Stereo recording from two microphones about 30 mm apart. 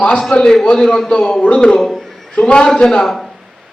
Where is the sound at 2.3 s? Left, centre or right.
Left.